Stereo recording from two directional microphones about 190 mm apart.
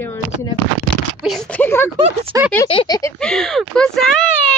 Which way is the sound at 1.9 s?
30° right (ahead or behind).